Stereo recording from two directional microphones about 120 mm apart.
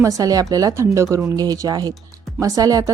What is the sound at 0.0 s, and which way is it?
A woman's voice, 30° right (ahead or behind).